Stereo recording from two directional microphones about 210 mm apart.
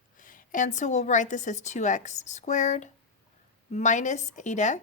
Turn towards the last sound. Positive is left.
turn(degrees=35)  # may be behind; listen again after turning